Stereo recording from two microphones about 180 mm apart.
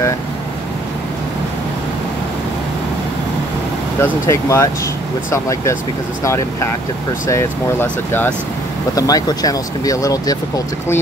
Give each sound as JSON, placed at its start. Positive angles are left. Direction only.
{"t": 4.0, "sound": "speech", "side_deg": 15}
{"t": 8.9, "sound": "speech", "side_deg": 20}